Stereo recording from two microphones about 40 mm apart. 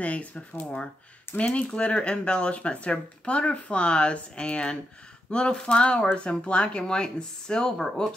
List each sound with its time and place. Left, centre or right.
0.0 s speech: left; by 7.8 s centre